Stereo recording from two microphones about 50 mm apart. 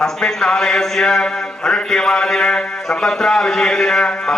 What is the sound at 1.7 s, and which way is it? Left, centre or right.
A man's voice, centre.